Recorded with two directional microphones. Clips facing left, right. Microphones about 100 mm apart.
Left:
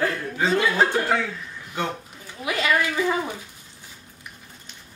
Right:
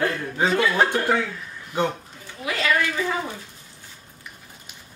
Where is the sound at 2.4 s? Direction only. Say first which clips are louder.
Even; 15° left (ahead or behind).